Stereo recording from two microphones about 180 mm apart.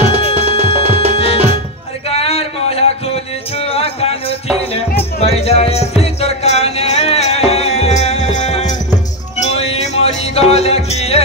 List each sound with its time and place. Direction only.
0.3 s music: 35° right (ahead or behind)
1.1 s music: 35° left (ahead or behind)
2.0 s a sound: 35° left (ahead or behind)
3.5 s music: 35° left (ahead or behind)